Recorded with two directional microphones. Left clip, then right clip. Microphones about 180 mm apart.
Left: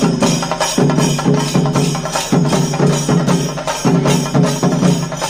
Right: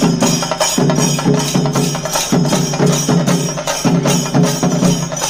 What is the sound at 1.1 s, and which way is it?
Music, 35° right (ahead or behind).